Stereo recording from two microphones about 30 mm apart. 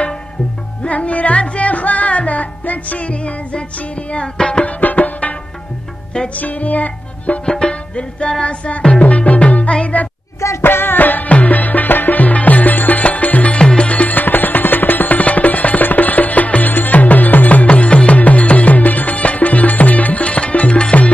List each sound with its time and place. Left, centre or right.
0.8 s music: left
3.1 s music: left
4.6 s music: left
6.3 s music: left
7.4 s music: left
9.0 s music: left
11.0 s music: left
11.2 s music: left
13.0 s music: left
13.6 s music: left
13.8 s music: left
17.6 s music: left
20.2 s music: left